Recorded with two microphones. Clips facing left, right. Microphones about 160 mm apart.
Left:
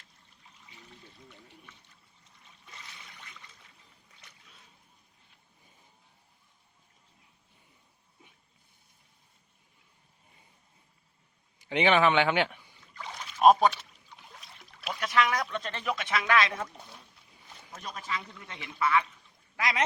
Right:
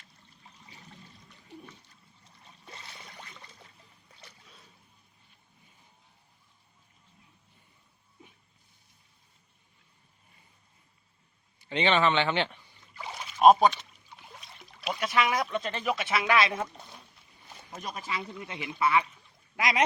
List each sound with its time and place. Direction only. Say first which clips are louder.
2.4 s a sound: right 3 dB; 35° right (ahead or behind)
4.1 s boat: right 5 dB; 35° right (ahead or behind)
11.6 s speech: left 2 dB; 10° left (ahead or behind)
12.9 s rowboat: right 2 dB; 10° right (ahead or behind)
14.7 s a sound: right 4 dB; centre (ahead or behind)
14.9 s speech: even; 10° right (ahead or behind)
18.2 s speech: right 7 dB; 25° right (ahead or behind)